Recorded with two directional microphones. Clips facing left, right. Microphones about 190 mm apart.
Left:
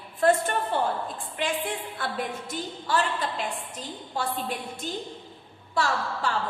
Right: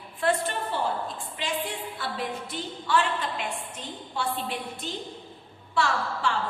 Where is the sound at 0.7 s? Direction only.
55° left (ahead or behind).